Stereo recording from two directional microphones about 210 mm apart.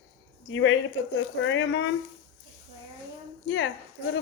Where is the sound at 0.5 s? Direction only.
70° left (ahead or behind).